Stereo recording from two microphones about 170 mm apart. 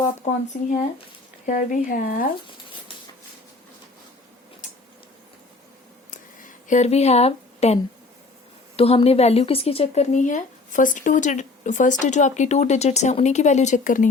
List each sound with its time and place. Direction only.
1.5 s speech: 50° left (ahead or behind)
6.1 s a sound: 50° left (ahead or behind)
8.7 s speech: 35° left (ahead or behind); by 14.1 s 50° left (ahead or behind)